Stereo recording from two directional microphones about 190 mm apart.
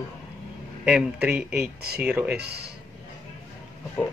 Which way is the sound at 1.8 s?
55° right (ahead or behind).